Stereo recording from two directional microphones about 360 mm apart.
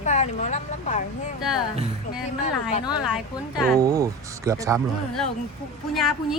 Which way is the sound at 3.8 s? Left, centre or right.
Centre.